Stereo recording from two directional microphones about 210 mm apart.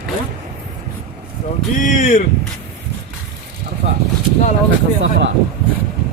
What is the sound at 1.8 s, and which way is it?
Speech, 40° left (ahead or behind).